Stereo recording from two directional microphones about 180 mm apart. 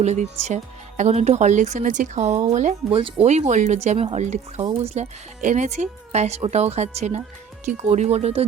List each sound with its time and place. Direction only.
0.0 s speech: 40° right (ahead or behind)